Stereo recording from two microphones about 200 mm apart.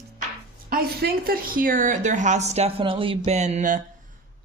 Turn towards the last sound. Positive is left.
turn(degrees=-35)  # may be behind; listen again after turning